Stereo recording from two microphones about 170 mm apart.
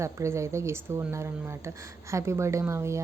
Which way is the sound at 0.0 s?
15° right (ahead or behind).